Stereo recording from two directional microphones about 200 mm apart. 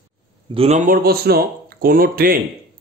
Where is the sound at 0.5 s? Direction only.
35° right (ahead or behind).